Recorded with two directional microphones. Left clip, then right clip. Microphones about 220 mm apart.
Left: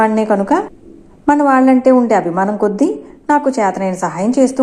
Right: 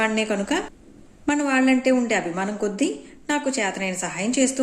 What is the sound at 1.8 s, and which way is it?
A woman's voice, 15° right (ahead or behind).